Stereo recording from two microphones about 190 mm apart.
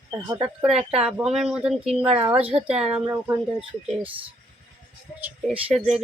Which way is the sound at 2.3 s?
5° right (ahead or behind).